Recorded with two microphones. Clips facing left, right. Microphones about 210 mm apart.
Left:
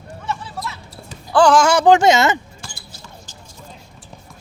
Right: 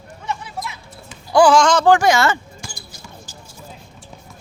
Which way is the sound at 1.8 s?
20° left (ahead or behind).